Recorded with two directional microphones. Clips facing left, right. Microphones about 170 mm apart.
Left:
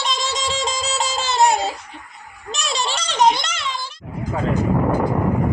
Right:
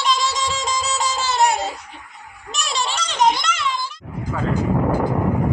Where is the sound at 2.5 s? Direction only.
30° left (ahead or behind).